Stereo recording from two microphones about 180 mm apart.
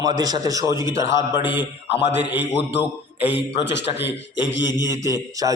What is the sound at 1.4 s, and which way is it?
A man's voice, 80° left.